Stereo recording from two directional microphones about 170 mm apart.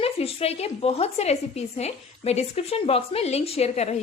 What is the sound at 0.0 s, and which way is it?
A woman's voice, 35° left (ahead or behind).